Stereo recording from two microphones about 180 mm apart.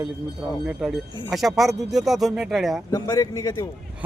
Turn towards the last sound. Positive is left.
turn(degrees=20)  # may be behind; listen again after turning